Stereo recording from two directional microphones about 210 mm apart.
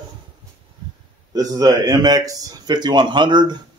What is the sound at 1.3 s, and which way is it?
Speech, 20° right (ahead or behind).